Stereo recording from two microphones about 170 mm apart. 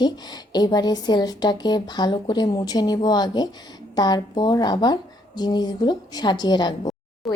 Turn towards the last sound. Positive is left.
turn(degrees=0)  # may be behind; listen again after turning